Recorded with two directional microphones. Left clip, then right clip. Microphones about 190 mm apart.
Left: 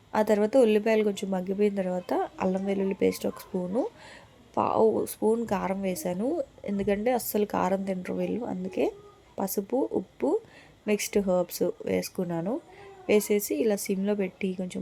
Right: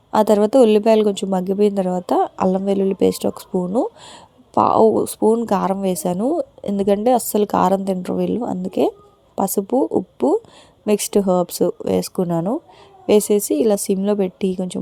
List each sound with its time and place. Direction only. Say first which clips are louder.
0.1 s a woman's voice: right 9 dB; 40° right (ahead or behind)